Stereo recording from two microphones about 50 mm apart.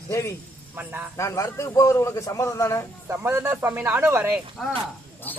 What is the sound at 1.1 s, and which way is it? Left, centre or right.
Speech, left.